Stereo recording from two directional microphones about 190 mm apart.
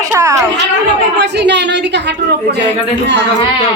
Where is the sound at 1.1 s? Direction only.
65° right (ahead or behind).